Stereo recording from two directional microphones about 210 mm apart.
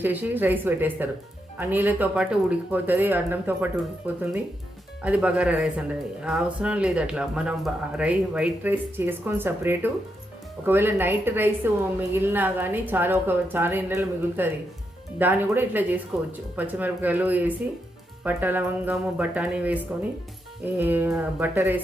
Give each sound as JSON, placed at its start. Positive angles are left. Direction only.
{"t": 0.0, "sound": "a woman's voice", "side_deg": -10}